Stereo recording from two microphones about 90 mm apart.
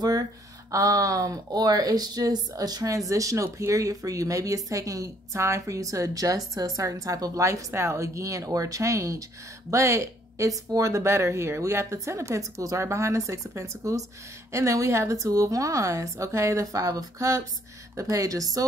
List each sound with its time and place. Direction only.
0.7 s speech: 40° right (ahead or behind)